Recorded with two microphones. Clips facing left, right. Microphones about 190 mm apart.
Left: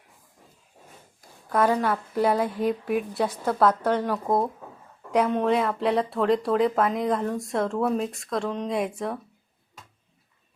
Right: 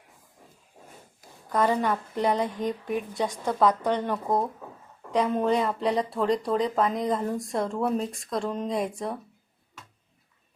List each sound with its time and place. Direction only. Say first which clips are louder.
1.5 s speech: left 2 dB; 5° left (ahead or behind)